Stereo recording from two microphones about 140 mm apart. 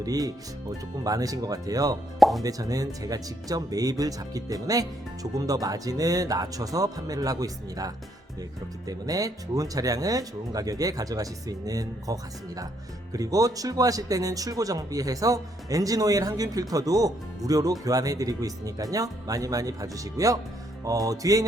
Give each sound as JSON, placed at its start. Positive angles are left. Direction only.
{"t": 0.0, "sound": "speech", "side_deg": -25}
{"t": 2.1, "sound": "speech", "side_deg": 0}
{"t": 2.4, "sound": "speech", "side_deg": -25}